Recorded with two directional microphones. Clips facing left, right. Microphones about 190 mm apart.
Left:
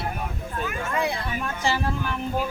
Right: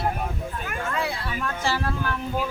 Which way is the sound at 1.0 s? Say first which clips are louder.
Left 4 dB; 15° left (ahead or behind).